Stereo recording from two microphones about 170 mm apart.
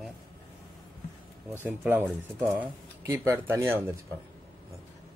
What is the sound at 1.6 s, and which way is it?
Speech, 10° right (ahead or behind).